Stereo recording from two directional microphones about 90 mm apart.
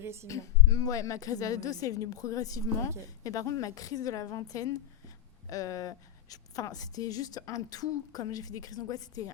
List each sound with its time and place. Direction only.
0.0 s a woman's voice: 30° right (ahead or behind)
0.3 s a woman's voice: 35° left (ahead or behind)